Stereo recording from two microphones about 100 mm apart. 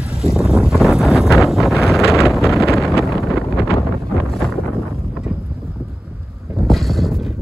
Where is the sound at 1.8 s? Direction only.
30° left (ahead or behind).